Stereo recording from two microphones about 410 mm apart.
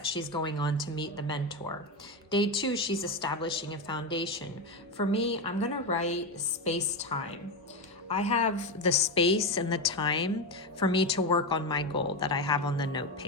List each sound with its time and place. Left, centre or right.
0.1 s a woman's voice: centre